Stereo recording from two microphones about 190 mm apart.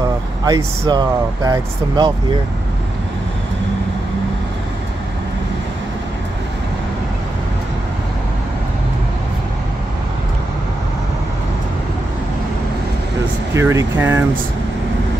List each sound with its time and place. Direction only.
0.5 s speech: 20° right (ahead or behind)
13.5 s speech: 15° right (ahead or behind)